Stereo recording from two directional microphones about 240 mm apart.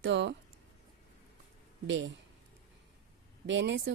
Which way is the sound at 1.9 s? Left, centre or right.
Right.